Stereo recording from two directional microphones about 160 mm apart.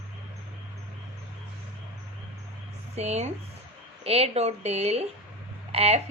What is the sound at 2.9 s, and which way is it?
Speech, 45° right (ahead or behind).